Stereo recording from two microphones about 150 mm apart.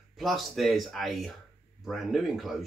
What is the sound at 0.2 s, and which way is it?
Speech, centre (ahead or behind).